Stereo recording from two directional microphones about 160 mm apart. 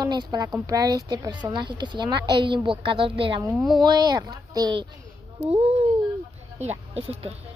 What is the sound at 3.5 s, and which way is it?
Speech, centre (ahead or behind).